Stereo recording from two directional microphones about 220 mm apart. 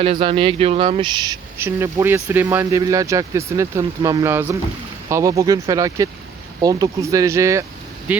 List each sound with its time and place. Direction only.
0.0 s speech: 25° right (ahead or behind); by 8.2 s 5° right (ahead or behind)